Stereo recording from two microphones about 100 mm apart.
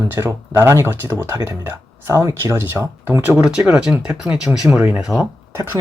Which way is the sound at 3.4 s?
5° right (ahead or behind).